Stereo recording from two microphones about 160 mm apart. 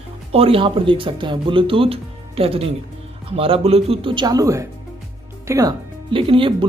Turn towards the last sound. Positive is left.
turn(degrees=-35)  # may be behind; listen again after turning